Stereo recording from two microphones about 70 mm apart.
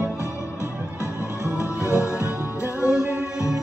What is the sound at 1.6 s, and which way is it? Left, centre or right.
Music, left.